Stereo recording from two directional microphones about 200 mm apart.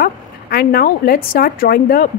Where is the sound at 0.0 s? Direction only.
50° left (ahead or behind).